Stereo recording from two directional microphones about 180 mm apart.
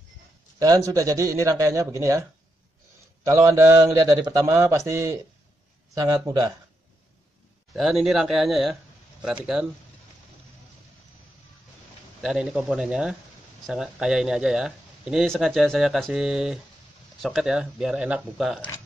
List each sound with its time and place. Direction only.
0.6 s speech: 20° right (ahead or behind)
3.3 s speech: 15° right (ahead or behind)
7.7 s a man's voice: centre (ahead or behind)
12.2 s a man's voice: centre (ahead or behind)